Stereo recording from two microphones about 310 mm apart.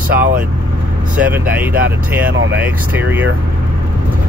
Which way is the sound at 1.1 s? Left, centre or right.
Centre.